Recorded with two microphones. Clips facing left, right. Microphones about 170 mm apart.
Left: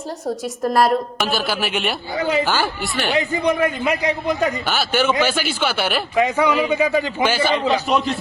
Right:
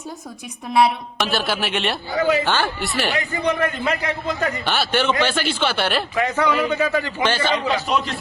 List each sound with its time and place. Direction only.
0.7 s a woman's voice: centre (ahead or behind)
3.1 s a man's voice: 25° left (ahead or behind)
3.4 s a man's voice: 15° left (ahead or behind)
4.6 s a woman's voice: 5° left (ahead or behind)
6.1 s a man's voice: 15° left (ahead or behind)